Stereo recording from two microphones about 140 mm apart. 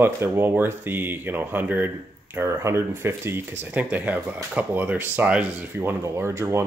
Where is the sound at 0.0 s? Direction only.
15° right (ahead or behind).